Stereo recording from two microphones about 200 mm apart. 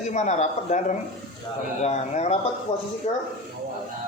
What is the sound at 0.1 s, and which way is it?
Speech, 35° left (ahead or behind).